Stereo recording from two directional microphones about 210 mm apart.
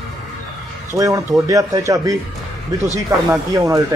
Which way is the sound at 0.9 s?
15° right (ahead or behind).